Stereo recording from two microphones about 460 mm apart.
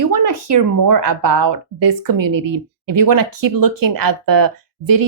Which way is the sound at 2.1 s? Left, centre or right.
Right.